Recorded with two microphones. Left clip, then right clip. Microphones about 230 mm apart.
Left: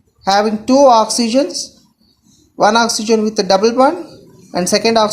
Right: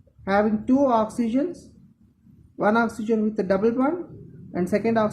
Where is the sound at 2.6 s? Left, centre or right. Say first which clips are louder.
Left 10 dB; centre.